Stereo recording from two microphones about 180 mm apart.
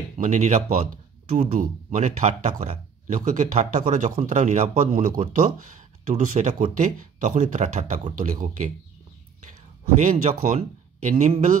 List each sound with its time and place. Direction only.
0.2 s speech: 40° right (ahead or behind)
10.0 s speech: 45° right (ahead or behind)